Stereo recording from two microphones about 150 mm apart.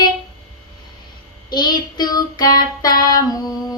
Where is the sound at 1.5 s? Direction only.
30° left (ahead or behind).